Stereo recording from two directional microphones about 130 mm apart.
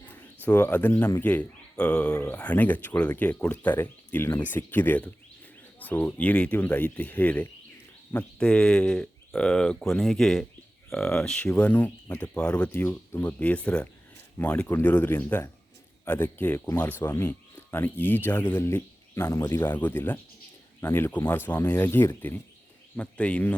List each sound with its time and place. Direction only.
0.4 s speech: 15° left (ahead or behind)